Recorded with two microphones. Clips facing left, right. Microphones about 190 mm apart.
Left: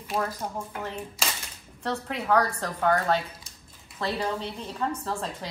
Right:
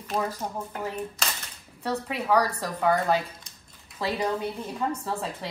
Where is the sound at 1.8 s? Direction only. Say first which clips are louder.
Right 1 dB; 5° right (ahead or behind).